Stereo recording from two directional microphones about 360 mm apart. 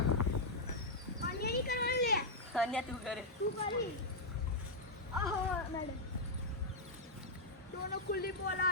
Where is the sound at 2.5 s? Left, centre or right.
Centre.